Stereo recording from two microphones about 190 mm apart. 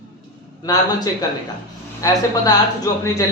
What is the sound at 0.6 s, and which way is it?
Speech, 20° left (ahead or behind).